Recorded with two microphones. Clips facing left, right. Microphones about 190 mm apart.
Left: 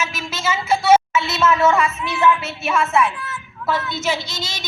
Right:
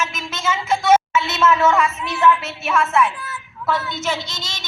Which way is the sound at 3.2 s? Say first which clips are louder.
Left 1 dB; 35° right (ahead or behind).